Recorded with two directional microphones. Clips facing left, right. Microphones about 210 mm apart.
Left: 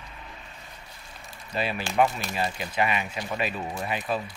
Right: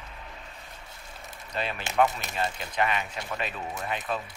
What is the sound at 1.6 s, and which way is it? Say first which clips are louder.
Speech: left 2 dB; 10° left (ahead or behind).